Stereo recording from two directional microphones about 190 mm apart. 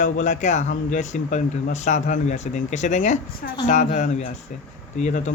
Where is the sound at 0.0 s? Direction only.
40° left (ahead or behind).